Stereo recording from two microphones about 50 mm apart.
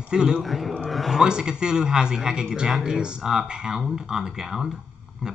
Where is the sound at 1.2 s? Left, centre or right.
Centre.